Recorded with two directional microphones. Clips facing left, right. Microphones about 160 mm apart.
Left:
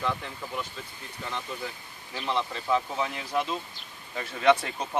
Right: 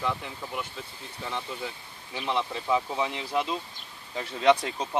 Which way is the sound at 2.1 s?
15° right (ahead or behind).